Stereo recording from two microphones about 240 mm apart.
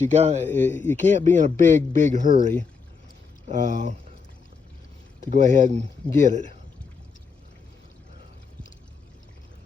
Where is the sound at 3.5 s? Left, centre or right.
Right.